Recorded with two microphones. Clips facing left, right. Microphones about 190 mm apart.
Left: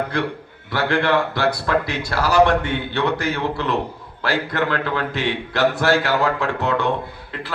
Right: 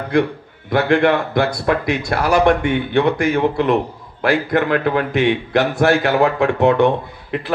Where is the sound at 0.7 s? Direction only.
20° right (ahead or behind).